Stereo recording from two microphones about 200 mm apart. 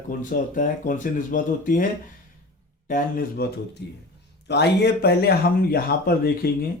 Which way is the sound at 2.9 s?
45° left (ahead or behind).